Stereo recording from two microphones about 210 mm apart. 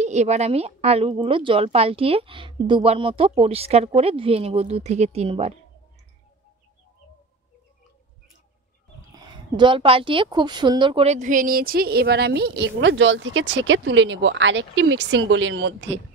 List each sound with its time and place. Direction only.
0.0 s a woman's voice: 35° right (ahead or behind)
9.2 s speech: 20° right (ahead or behind); by 16.0 s 60° right (ahead or behind)